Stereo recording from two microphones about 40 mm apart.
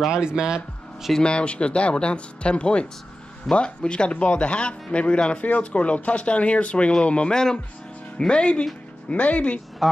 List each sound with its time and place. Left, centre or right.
0.1 s speech: right
1.2 s speech: left
9.1 s speech: left